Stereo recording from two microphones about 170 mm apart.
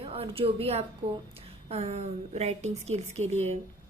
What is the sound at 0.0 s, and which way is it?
A woman's voice, 35° right (ahead or behind).